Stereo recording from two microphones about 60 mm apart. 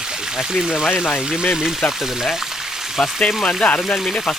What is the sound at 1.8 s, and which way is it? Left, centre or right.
Speech, centre.